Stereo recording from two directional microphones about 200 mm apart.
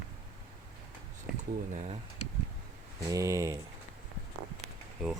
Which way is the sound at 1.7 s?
35° right (ahead or behind).